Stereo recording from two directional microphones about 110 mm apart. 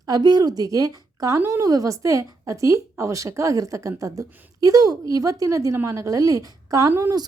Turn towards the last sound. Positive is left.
turn(degrees=-25)  # may be behind; listen again after turning